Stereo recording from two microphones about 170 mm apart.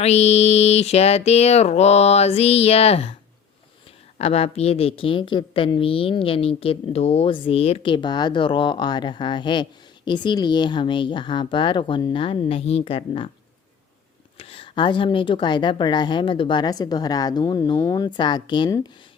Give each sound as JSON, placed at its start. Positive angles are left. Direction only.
{"t": 0.0, "sound": "a woman's voice", "side_deg": 40}
{"t": 4.2, "sound": "a woman's voice", "side_deg": 35}
{"t": 14.3, "sound": "a woman's voice", "side_deg": 35}